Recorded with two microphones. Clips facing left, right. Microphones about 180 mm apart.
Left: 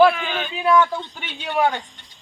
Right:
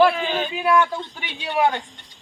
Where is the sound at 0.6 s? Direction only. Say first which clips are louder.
Left 3 dB; 10° right (ahead or behind).